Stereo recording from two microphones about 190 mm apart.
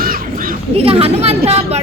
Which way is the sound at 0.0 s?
50° right (ahead or behind).